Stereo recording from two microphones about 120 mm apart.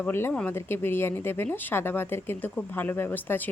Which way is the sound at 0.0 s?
15° left (ahead or behind).